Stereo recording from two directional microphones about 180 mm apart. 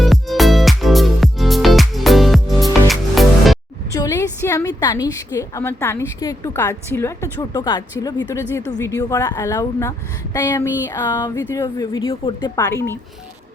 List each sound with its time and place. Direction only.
0.0 s music: centre (ahead or behind)
3.9 s a woman's voice: 20° left (ahead or behind)